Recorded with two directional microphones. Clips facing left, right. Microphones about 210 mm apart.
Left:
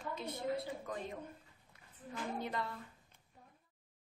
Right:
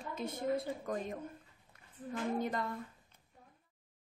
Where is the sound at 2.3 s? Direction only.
45° right (ahead or behind).